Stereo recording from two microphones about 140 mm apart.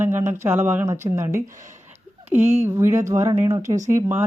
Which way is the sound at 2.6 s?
20° right (ahead or behind).